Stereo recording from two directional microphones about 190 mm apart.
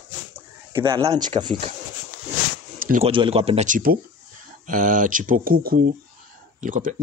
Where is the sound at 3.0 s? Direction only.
30° right (ahead or behind).